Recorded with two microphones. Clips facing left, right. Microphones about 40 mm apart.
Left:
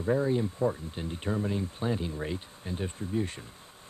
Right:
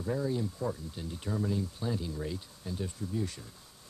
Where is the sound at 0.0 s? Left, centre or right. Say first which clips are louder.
Left 5 dB; left.